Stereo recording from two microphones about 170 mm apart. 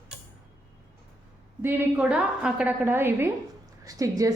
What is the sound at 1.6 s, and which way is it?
A woman's voice, 10° right (ahead or behind).